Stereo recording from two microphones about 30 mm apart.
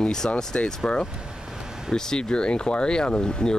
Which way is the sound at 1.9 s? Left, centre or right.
Left.